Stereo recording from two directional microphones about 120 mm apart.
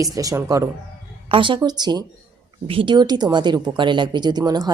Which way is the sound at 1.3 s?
45° right (ahead or behind).